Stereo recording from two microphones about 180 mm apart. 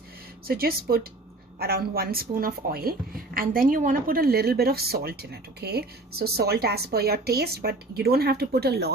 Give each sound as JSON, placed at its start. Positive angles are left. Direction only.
{"t": 0.4, "sound": "speech", "side_deg": -55}